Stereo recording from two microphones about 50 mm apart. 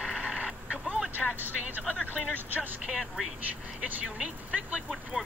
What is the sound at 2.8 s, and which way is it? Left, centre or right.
Speech, centre.